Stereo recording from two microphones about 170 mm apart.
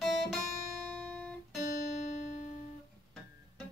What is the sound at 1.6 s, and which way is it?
Music, 55° left (ahead or behind).